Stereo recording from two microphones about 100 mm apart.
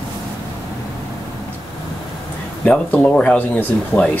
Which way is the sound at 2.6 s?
15° left (ahead or behind).